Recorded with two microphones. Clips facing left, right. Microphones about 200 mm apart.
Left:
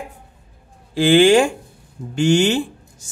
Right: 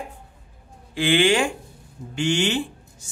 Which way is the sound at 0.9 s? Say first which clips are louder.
Left 7 dB; 40° left (ahead or behind).